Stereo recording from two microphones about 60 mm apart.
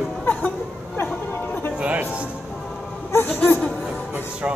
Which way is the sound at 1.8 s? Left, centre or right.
Right.